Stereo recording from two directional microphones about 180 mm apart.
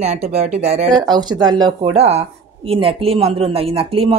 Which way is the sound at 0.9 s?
25° right (ahead or behind).